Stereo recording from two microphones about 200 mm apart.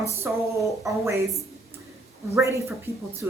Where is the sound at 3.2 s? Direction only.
10° right (ahead or behind).